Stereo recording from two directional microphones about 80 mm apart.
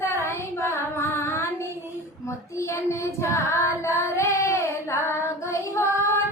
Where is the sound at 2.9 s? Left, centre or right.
Left.